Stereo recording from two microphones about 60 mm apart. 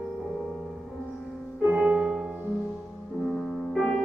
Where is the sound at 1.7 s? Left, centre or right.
Right.